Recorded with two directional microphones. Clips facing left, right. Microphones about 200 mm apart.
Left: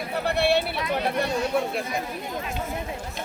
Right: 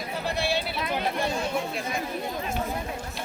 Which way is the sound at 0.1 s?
65° left (ahead or behind).